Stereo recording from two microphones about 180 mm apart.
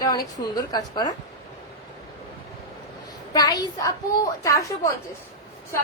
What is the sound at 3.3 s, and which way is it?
A woman's voice, 20° left (ahead or behind).